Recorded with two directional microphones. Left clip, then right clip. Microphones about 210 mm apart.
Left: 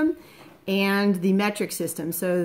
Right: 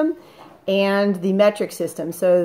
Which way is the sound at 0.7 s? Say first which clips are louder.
Right 5 dB; 90° left.